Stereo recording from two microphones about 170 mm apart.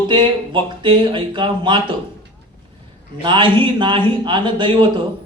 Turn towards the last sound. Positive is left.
turn(degrees=-30)  # may be behind; listen again after turning